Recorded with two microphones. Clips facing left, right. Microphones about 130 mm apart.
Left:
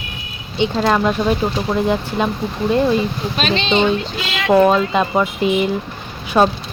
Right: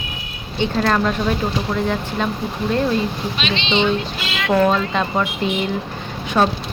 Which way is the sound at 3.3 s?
45° left (ahead or behind).